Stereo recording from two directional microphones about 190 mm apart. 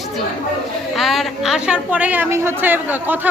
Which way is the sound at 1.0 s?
Centre (ahead or behind).